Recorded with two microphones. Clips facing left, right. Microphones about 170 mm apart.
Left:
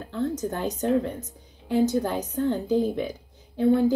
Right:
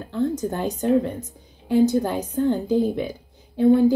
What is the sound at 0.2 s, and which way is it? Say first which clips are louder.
A woman's voice: right 4 dB; 10° right (ahead or behind).